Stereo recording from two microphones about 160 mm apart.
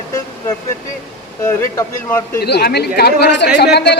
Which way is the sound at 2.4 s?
85° left.